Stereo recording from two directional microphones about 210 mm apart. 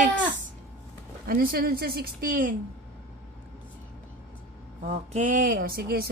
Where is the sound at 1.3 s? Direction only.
45° right (ahead or behind).